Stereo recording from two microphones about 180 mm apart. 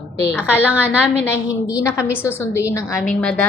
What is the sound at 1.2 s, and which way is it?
A woman's voice, 15° left (ahead or behind).